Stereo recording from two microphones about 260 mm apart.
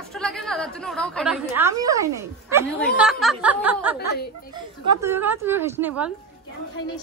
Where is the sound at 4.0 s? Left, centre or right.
Left.